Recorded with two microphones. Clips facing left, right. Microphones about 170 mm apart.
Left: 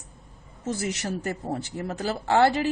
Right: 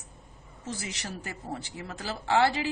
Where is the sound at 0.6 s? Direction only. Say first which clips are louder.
Left 8 dB; 45° left (ahead or behind).